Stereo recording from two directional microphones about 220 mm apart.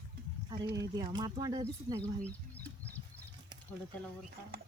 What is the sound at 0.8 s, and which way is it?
Speech, 20° right (ahead or behind).